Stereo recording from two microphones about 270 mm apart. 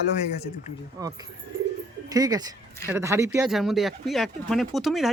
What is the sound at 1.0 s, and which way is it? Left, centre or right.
Speech, centre.